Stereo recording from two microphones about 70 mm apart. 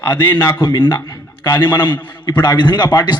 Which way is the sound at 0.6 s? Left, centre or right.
Left.